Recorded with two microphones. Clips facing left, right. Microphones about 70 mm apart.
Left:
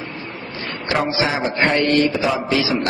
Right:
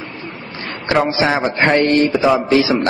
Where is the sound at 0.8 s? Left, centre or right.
Right.